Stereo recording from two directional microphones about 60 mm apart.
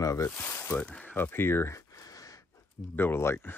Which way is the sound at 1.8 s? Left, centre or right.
Left.